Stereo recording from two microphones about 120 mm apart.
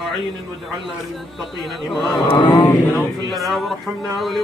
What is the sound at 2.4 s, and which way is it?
Speech, 35° left (ahead or behind).